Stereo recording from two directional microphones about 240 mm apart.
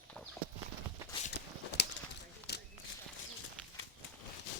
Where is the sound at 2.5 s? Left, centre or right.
Left.